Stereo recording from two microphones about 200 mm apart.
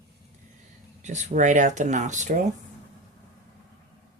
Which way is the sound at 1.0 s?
35° right (ahead or behind).